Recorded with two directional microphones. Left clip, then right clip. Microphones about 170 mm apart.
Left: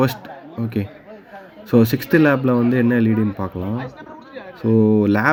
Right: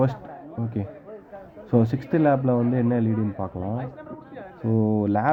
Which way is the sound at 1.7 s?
Centre (ahead or behind).